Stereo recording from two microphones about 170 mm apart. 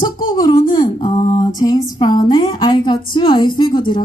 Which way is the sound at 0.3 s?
30° left (ahead or behind).